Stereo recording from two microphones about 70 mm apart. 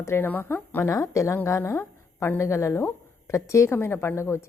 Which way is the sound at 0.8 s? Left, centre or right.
Left.